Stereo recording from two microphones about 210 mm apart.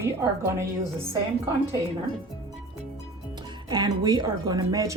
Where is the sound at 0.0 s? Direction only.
15° right (ahead or behind).